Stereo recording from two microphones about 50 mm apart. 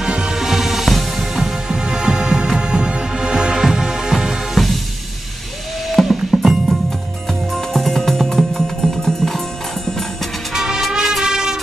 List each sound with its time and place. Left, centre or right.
0.0 s music: centre
5.9 s music: centre
10.5 s music: centre